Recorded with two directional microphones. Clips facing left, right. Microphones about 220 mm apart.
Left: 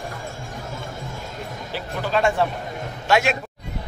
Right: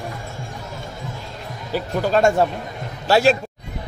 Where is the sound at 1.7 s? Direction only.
45° right (ahead or behind).